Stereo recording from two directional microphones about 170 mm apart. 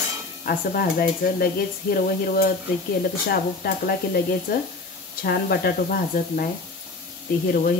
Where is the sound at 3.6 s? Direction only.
65° left (ahead or behind).